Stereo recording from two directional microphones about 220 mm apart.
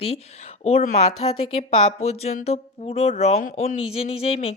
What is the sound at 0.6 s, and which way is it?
A woman's voice, 30° left (ahead or behind).